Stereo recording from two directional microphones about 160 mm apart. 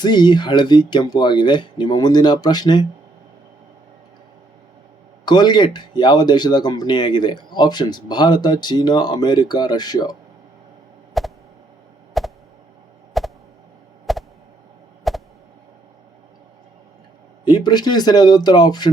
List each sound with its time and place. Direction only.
0.0 s speech: 25° left (ahead or behind)
5.2 s speech: 25° left (ahead or behind)
11.2 s a sound: centre (ahead or behind)
17.4 s speech: 25° left (ahead or behind)